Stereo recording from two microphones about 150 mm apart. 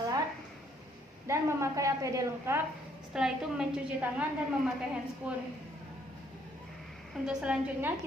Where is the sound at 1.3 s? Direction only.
20° right (ahead or behind).